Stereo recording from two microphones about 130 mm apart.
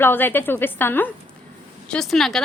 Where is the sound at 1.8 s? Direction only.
5° left (ahead or behind).